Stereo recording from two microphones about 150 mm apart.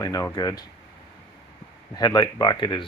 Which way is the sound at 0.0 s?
20° left (ahead or behind).